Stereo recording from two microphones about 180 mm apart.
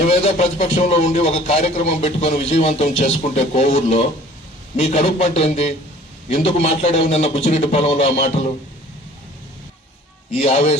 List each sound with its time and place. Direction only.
0.1 s a man's voice: 35° left (ahead or behind)
10.3 s a man's voice: 35° left (ahead or behind)